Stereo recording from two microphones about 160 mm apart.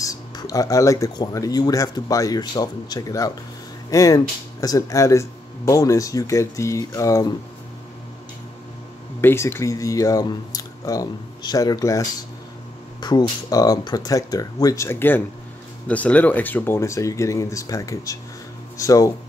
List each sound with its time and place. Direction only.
0.0 s speech: 20° left (ahead or behind)
9.2 s speech: 15° left (ahead or behind)